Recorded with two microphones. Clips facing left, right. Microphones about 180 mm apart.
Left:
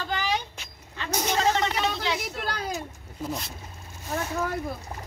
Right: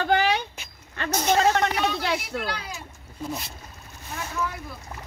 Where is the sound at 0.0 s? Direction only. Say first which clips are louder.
Right 7 dB; 60° right (ahead or behind).